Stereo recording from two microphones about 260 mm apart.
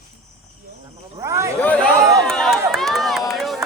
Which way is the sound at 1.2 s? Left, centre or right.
Centre.